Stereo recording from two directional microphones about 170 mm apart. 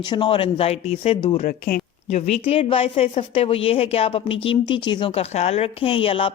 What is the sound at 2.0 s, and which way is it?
Speech, 40° left (ahead or behind).